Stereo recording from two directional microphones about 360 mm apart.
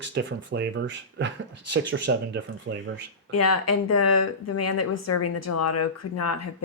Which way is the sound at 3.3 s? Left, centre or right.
Left.